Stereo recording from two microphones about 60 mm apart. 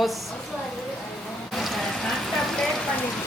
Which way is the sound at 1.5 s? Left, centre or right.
Centre.